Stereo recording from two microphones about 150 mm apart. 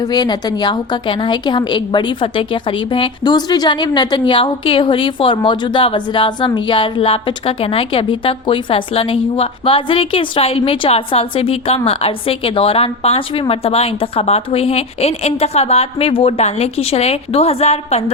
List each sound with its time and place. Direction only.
0.0 s a woman's voice: 30° left (ahead or behind); by 18.0 s 45° left (ahead or behind)